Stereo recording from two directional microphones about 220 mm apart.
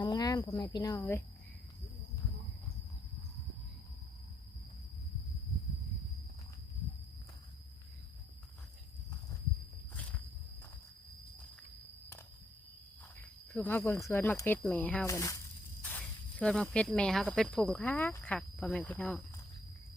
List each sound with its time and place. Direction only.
0.0 s speech: 20° left (ahead or behind)
13.1 s speech: 10° left (ahead or behind)